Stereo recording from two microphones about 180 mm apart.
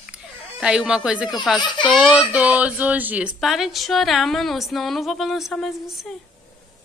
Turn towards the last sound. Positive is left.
turn(degrees=0)  # may be behind; listen again after turning